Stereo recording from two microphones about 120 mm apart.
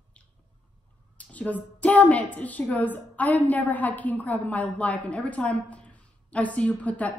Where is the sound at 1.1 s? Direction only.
10° left (ahead or behind).